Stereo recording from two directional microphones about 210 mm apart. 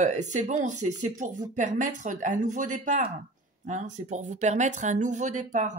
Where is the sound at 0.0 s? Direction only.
35° right (ahead or behind).